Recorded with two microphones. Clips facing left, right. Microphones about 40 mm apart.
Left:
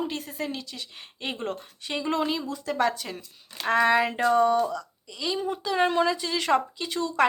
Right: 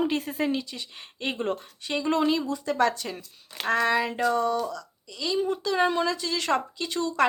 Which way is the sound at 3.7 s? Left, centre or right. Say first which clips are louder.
Left 2 dB; centre.